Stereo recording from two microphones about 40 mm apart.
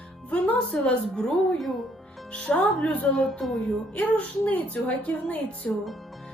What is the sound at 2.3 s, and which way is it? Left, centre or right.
Speech, left.